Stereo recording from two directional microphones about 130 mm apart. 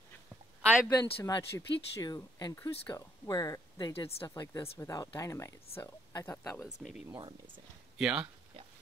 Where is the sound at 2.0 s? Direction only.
30° left (ahead or behind).